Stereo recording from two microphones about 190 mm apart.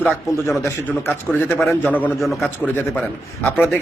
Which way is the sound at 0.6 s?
10° left (ahead or behind).